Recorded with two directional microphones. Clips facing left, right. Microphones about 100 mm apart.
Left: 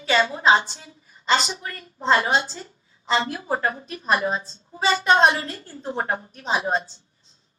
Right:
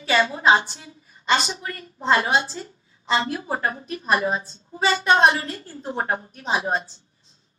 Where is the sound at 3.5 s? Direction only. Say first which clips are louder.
Left 1 dB; 30° left (ahead or behind).